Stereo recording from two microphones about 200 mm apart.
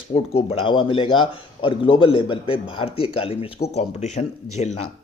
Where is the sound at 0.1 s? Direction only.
30° left (ahead or behind).